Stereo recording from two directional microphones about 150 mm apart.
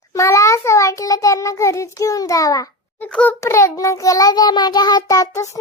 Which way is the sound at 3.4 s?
20° left (ahead or behind).